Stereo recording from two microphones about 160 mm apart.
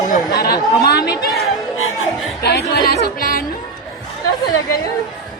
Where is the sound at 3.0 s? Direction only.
65° left (ahead or behind).